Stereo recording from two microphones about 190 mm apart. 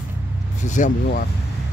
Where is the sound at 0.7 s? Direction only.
40° left (ahead or behind).